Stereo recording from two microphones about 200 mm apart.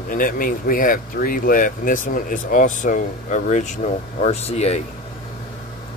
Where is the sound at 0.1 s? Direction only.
45° left (ahead or behind).